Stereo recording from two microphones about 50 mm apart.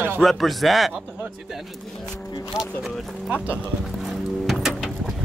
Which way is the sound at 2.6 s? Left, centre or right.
Left.